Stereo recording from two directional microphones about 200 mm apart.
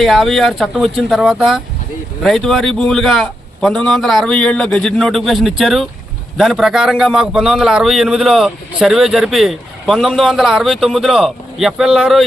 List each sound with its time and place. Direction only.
0.0 s a man's voice: centre (ahead or behind)